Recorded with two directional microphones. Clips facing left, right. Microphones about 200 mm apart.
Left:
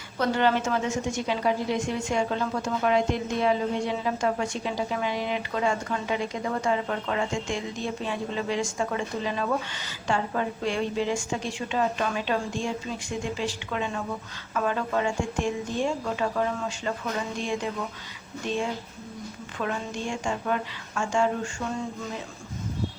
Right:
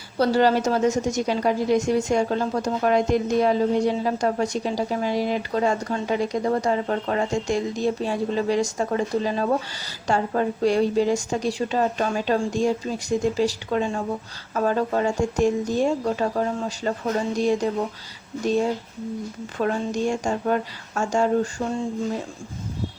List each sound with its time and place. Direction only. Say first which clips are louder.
0.2 s a woman's voice: right 5 dB; 35° right (ahead or behind)